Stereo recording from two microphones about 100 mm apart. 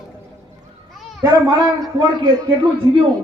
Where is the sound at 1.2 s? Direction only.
40° right (ahead or behind).